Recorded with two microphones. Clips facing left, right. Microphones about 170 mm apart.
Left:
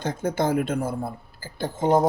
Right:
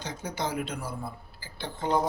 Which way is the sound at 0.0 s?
50° left (ahead or behind).